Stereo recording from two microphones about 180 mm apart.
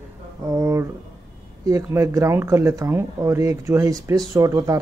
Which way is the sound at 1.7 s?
15° right (ahead or behind).